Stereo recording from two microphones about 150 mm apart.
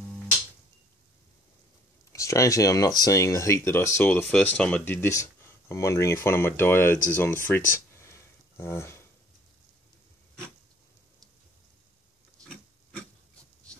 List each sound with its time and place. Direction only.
2.1 s speech: 20° left (ahead or behind)
8.0 s a sound: 20° left (ahead or behind)
12.4 s filing: 5° left (ahead or behind)